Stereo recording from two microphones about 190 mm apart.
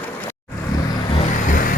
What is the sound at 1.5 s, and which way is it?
Vehicle, 45° left (ahead or behind).